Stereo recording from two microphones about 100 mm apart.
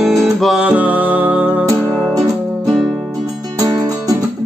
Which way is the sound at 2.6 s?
Centre (ahead or behind).